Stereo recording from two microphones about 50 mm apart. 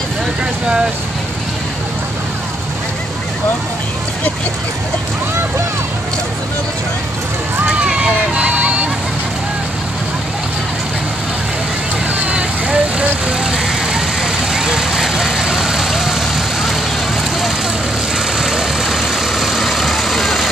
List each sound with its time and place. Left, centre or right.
7.8 s vehicle: right
12.3 s vehicle: right
18.4 s vehicle: centre